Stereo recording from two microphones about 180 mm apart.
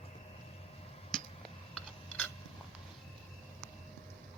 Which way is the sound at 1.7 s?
10° left (ahead or behind).